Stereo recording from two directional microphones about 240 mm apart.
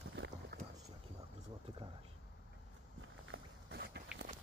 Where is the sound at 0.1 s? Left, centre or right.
Right.